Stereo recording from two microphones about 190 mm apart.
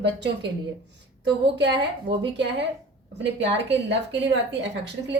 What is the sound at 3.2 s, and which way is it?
A woman's voice, 65° right (ahead or behind).